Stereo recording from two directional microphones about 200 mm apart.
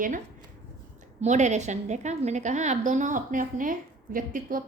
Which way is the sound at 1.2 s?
35° right (ahead or behind).